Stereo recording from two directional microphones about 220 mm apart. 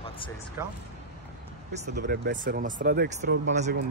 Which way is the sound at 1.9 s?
50° right (ahead or behind).